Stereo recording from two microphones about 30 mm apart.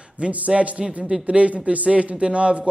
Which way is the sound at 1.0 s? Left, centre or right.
Right.